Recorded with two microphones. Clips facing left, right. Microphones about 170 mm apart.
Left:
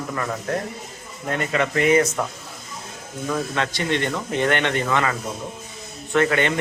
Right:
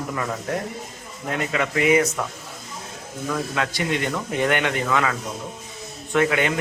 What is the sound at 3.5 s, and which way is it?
Speech, 10° right (ahead or behind).